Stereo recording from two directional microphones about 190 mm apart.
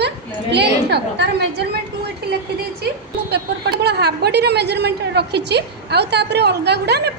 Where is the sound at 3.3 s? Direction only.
60° right (ahead or behind).